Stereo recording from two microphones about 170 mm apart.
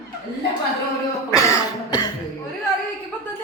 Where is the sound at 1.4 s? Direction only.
20° left (ahead or behind).